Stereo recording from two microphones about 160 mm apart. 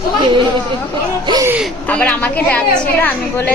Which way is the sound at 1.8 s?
10° left (ahead or behind).